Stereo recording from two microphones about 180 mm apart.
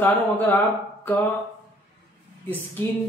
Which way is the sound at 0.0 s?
10° left (ahead or behind).